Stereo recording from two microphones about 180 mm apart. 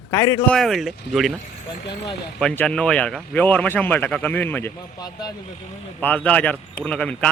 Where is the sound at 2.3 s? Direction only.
5° left (ahead or behind).